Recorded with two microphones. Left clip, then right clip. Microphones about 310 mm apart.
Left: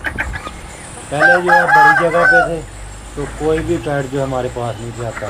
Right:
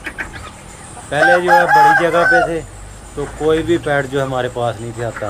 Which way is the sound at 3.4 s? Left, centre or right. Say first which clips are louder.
Right 2 dB; centre.